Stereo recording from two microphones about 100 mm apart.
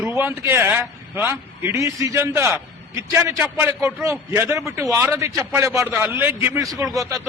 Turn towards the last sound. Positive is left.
turn(degrees=-35)  # may be behind; listen again after turning